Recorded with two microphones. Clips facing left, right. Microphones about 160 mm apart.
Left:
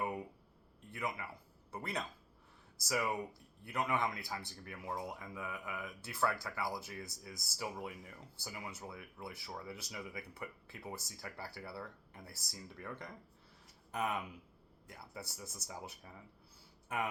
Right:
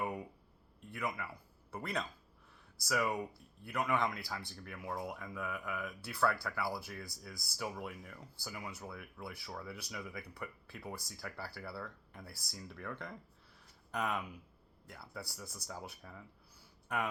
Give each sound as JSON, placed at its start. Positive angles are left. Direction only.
{"t": 0.9, "sound": "speech", "side_deg": 20}